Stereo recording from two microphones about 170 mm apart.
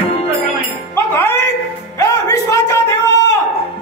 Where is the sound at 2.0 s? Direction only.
20° left (ahead or behind).